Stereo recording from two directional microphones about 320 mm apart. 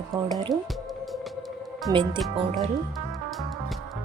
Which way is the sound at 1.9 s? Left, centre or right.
Centre.